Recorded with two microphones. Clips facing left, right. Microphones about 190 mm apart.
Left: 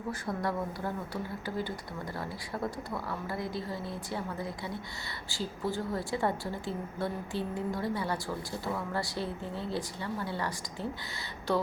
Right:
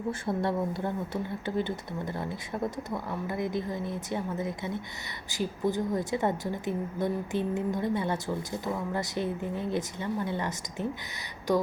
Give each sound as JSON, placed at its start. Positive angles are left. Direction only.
{"t": 0.1, "sound": "a woman's voice", "side_deg": -25}